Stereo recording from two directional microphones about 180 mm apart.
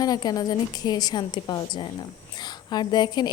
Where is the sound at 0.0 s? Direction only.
20° left (ahead or behind).